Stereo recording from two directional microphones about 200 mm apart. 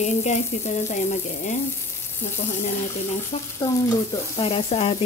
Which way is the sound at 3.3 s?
30° left (ahead or behind).